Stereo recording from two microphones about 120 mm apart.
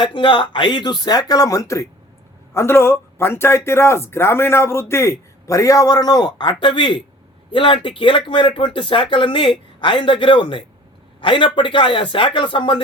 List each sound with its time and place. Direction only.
0.0 s a man's voice: 45° left (ahead or behind)